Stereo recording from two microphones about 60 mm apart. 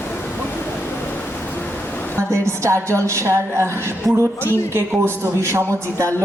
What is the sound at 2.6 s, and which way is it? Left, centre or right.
Music, right.